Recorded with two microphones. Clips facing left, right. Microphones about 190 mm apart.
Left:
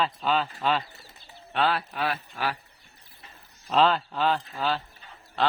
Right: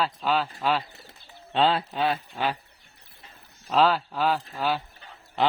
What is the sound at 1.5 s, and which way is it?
Speech, 25° right (ahead or behind).